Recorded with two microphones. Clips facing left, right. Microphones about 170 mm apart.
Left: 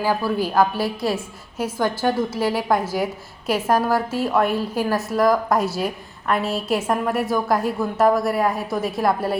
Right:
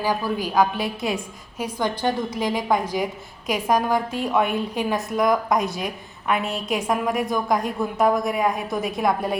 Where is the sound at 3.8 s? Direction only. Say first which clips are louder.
Left 2 dB; 5° left (ahead or behind).